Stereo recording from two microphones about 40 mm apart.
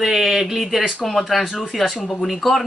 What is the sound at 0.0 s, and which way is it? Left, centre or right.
A man's voice, centre.